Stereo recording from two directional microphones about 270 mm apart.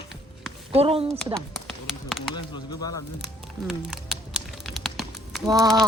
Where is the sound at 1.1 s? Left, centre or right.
Centre.